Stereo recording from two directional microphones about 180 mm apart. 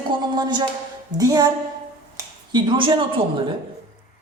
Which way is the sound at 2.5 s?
25° right (ahead or behind).